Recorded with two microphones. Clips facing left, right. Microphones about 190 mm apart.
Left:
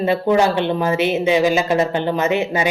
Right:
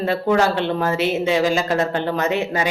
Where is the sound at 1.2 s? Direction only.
15° left (ahead or behind).